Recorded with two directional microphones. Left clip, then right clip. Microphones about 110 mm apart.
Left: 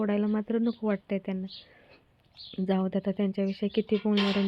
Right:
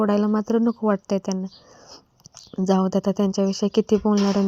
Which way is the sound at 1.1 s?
50° right (ahead or behind).